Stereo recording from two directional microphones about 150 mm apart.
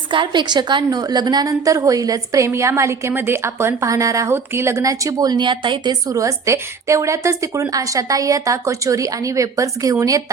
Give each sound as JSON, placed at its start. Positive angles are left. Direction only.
{"t": 0.1, "sound": "a woman's voice", "side_deg": -30}